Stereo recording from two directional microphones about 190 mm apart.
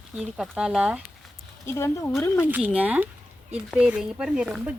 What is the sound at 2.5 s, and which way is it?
Speech, 10° right (ahead or behind).